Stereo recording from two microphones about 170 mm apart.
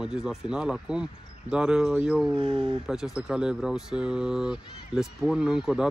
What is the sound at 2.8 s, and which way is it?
Speech, centre (ahead or behind).